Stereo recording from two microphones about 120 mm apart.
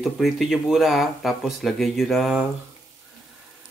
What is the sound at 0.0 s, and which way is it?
Speech, centre (ahead or behind).